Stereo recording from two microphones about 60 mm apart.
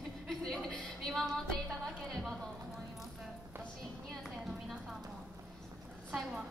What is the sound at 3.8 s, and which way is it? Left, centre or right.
Music, centre.